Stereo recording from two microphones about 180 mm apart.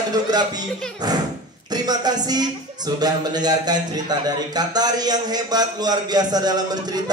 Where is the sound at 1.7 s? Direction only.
20° right (ahead or behind).